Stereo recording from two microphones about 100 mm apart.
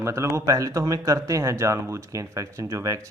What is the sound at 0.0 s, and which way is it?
A man's voice, 30° right (ahead or behind).